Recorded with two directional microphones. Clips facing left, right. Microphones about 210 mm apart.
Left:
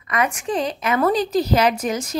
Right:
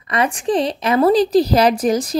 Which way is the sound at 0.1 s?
35° right (ahead or behind).